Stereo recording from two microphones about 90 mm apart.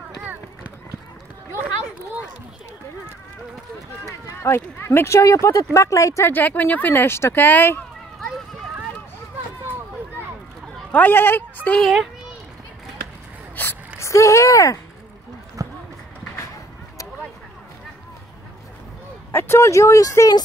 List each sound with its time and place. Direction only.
0.2 s run: 20° right (ahead or behind)
4.4 s speech: 25° left (ahead or behind)
6.3 s speech: 20° left (ahead or behind)
10.9 s speech: 20° left (ahead or behind)
11.8 s a child's voice: centre (ahead or behind)
13.6 s a sound: 25° left (ahead or behind)
15.6 s basketball bounce: 40° right (ahead or behind)
19.3 s speech: 30° left (ahead or behind)